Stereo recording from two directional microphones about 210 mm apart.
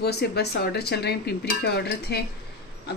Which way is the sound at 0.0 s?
50° left (ahead or behind).